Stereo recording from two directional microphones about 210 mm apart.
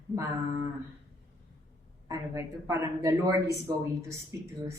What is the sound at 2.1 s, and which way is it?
Speech, 15° right (ahead or behind).